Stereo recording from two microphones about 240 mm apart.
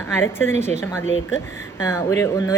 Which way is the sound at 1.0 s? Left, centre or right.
Left.